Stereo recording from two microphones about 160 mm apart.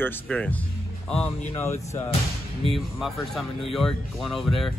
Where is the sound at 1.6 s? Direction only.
15° left (ahead or behind).